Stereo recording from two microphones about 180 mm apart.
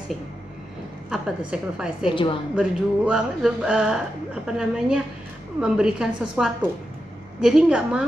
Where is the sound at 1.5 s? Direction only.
5° right (ahead or behind).